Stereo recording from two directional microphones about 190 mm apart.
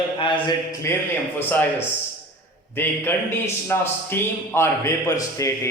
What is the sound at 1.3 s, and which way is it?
A man's voice, 10° left (ahead or behind).